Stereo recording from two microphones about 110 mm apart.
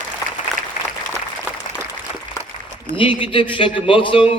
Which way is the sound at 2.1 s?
65° left (ahead or behind).